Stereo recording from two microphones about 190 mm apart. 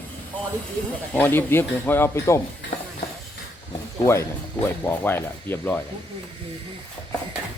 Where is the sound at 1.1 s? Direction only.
10° left (ahead or behind).